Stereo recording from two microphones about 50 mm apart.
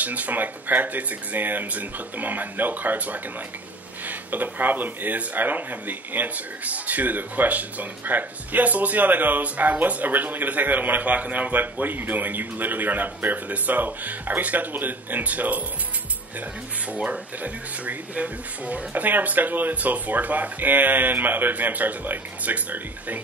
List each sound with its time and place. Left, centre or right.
0.0 s speech: right
16.9 s speech: right